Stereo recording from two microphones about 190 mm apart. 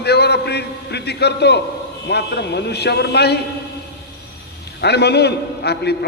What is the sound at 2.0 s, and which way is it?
A man's voice, 60° left (ahead or behind).